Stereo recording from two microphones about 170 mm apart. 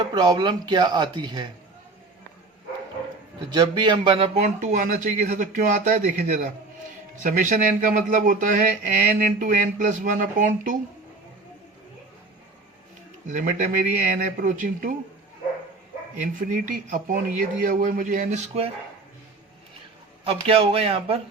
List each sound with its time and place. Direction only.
0.0 s speech: 25° right (ahead or behind)
3.5 s speech: 25° right (ahead or behind); by 10.8 s 50° right (ahead or behind)
13.2 s speech: 50° right (ahead or behind)
16.2 s speech: 50° right (ahead or behind)
20.2 s a man's voice: 35° right (ahead or behind)